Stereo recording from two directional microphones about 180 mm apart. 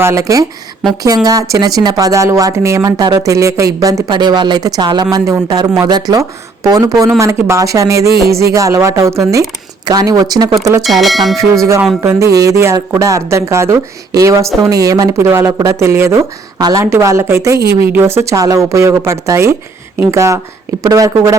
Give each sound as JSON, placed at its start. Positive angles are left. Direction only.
{"t": 0.0, "sound": "speech", "side_deg": -15}
{"t": 10.8, "sound": "speech", "side_deg": 0}
{"t": 11.6, "sound": "speech", "side_deg": -15}